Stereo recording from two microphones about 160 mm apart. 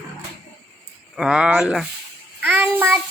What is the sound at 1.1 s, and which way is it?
Speech, 5° right (ahead or behind).